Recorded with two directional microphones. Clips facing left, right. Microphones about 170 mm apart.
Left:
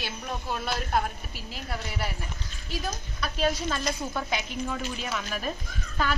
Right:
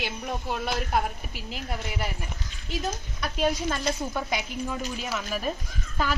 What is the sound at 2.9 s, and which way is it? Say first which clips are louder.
Speech: right 2 dB; 20° right (ahead or behind).